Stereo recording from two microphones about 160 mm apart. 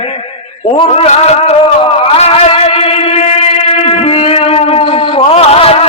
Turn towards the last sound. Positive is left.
turn(degrees=40)  # may be behind; listen again after turning